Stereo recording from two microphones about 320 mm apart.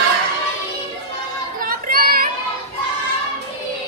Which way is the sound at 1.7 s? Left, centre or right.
Right.